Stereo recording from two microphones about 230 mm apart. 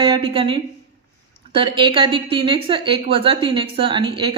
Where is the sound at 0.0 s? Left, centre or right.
Right.